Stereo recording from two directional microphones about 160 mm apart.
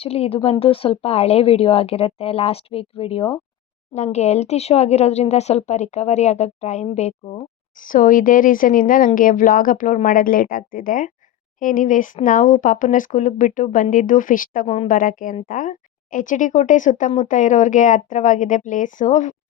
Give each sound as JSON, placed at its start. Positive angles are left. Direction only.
{"t": 0.0, "sound": "a woman's voice", "side_deg": 40}
{"t": 7.9, "sound": "speech", "side_deg": 60}